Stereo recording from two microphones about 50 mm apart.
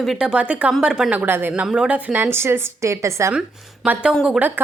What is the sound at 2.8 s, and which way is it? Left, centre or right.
Speech, right.